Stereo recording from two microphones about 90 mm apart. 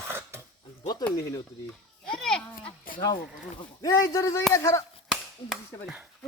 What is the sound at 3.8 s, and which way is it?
Speech, 40° left (ahead or behind).